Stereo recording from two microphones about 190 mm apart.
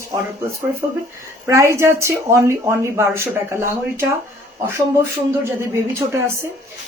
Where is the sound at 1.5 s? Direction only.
15° right (ahead or behind).